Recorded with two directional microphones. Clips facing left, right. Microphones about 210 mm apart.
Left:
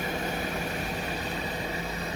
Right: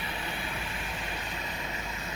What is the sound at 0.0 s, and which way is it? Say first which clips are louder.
Vehicle: left 7 dB; 45° left (ahead or behind).